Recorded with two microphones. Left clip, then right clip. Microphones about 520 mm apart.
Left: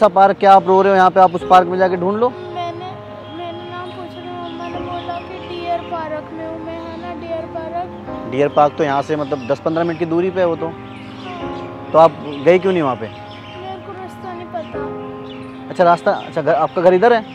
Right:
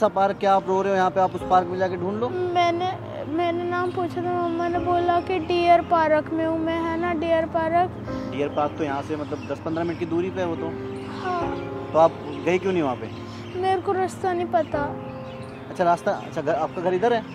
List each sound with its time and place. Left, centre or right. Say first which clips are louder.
0.0 s speech: left 10 dB; left
2.5 s a sound: right 4 dB; right
5.5 s a sound: right 5 dB; right
6.7 s music: right 3 dB; right
8.3 s speech: left 12 dB; left
11.9 s speech: left 8 dB; left
15.8 s speech: left 8 dB; left